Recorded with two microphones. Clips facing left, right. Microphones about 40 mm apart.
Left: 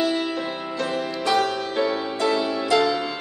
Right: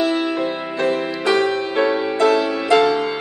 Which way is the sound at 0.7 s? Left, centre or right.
Right.